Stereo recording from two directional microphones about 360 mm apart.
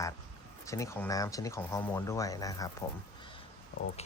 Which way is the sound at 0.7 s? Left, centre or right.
Centre.